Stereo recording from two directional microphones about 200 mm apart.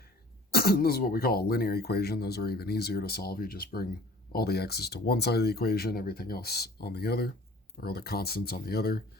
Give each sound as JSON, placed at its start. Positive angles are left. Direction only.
{"t": 0.5, "sound": "speech", "side_deg": 50}